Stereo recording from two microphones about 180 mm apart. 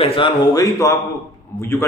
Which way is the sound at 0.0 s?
30° left (ahead or behind).